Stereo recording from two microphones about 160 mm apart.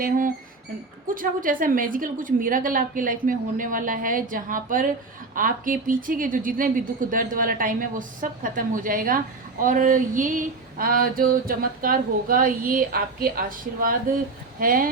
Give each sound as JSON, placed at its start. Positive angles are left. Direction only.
{"t": 1.0, "sound": "a woman's voice", "side_deg": -60}